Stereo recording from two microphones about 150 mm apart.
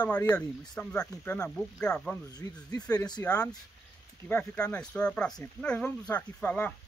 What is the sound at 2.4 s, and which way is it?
Speech, 20° left (ahead or behind).